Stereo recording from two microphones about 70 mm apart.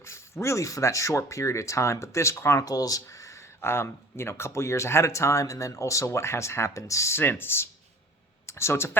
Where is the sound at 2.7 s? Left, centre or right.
Left.